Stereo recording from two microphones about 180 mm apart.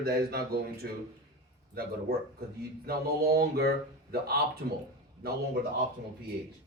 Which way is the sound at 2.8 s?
60° right (ahead or behind).